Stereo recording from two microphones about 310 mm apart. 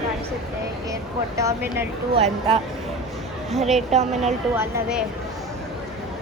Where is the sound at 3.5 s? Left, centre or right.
Centre.